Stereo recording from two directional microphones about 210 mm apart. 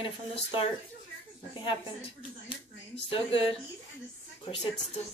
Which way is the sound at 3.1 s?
25° left (ahead or behind).